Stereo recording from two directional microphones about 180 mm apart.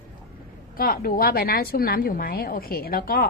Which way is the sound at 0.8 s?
55° left (ahead or behind).